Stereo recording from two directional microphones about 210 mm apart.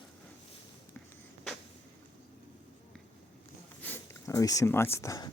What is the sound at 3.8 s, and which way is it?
Speech, 10° left (ahead or behind).